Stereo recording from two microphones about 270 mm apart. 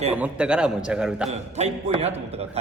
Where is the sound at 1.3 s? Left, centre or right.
Right.